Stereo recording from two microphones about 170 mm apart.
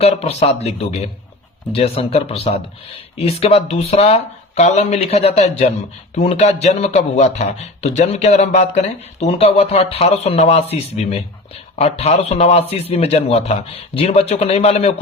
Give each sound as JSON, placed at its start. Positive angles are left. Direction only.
{"t": 0.0, "sound": "a man's voice", "side_deg": 35}